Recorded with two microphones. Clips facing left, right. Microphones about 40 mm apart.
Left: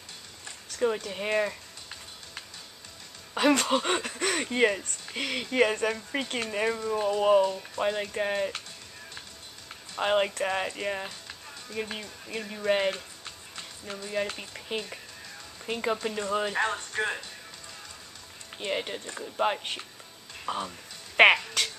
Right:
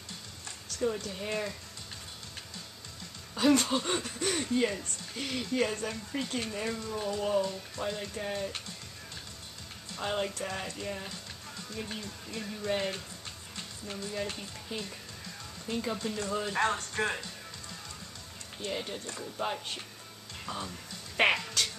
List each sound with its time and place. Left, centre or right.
0.7 s speech: left
3.3 s speech: left
5.4 s speech: left
6.8 s speech: left
9.9 s speech: left
11.7 s speech: left
13.2 s music: left
14.0 s speech: left
16.1 s speech: left
16.5 s speech: centre
18.7 s speech: left
21.2 s speech: left